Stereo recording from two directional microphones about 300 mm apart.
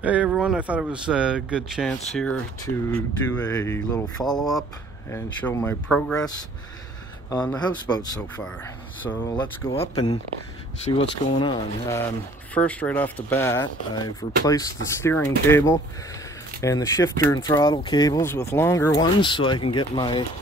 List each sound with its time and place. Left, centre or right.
0.0 s speech: centre
7.2 s speech: centre
12.5 s speech: centre